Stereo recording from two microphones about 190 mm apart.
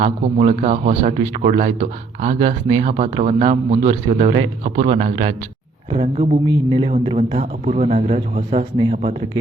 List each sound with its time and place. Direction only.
0.0 s a man's voice: 35° right (ahead or behind)